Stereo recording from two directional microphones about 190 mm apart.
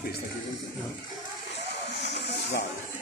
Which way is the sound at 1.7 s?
65° left (ahead or behind).